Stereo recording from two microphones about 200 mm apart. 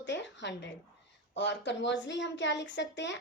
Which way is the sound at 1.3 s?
60° left (ahead or behind).